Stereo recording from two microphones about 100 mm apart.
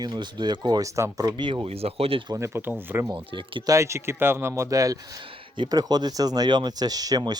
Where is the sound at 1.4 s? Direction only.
50° right (ahead or behind).